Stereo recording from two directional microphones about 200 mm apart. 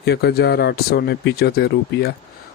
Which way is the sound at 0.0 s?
50° left (ahead or behind).